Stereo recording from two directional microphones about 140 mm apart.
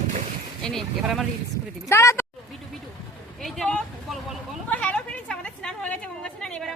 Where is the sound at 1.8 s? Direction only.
20° left (ahead or behind).